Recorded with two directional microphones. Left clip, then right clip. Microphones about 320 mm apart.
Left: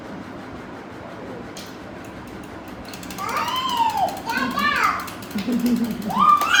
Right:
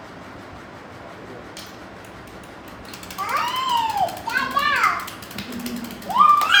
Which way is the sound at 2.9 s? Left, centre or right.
Centre.